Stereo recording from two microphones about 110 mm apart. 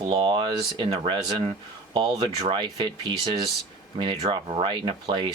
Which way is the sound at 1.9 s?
45° right (ahead or behind).